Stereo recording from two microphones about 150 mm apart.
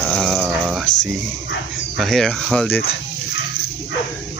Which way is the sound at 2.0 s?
Centre (ahead or behind).